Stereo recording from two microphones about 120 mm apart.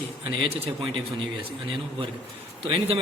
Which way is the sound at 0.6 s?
45° right (ahead or behind).